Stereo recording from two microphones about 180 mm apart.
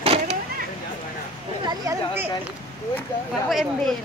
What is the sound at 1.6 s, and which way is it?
Speech, 20° right (ahead or behind).